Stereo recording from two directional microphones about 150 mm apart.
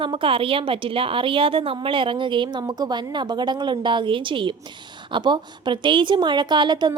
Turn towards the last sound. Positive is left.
turn(degrees=-30)  # may be behind; listen again after turning